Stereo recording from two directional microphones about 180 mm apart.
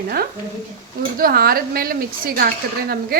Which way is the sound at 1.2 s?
55° right (ahead or behind).